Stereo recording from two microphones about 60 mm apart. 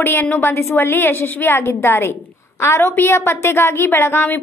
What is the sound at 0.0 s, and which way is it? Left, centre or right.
Speech, left.